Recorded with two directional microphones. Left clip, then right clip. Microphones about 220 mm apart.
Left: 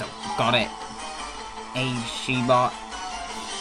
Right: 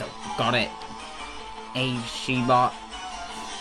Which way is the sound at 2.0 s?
Centre (ahead or behind).